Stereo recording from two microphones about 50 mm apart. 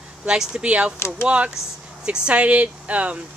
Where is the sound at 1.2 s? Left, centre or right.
Right.